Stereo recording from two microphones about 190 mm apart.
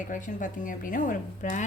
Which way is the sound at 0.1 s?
45° left (ahead or behind).